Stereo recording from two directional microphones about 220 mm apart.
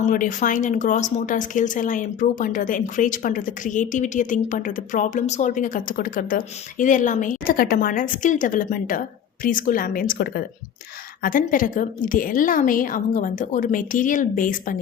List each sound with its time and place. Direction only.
0.0 s speech: 35° left (ahead or behind)